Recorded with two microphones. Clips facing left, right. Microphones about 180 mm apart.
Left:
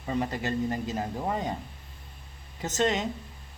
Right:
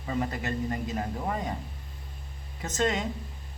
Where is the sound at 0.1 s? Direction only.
20° left (ahead or behind).